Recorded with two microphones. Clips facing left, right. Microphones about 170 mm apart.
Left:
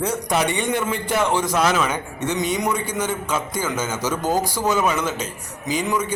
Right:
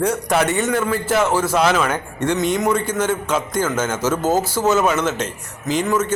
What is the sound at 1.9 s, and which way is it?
A man's voice, 10° left (ahead or behind).